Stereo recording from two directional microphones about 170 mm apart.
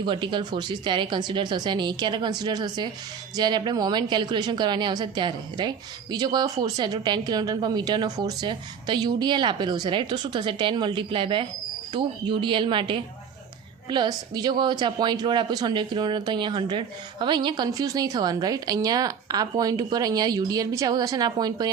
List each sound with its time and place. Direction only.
0.0 s a woman's voice: 30° right (ahead or behind)